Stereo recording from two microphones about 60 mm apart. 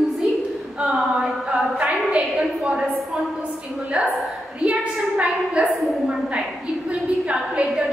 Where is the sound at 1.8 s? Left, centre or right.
Centre.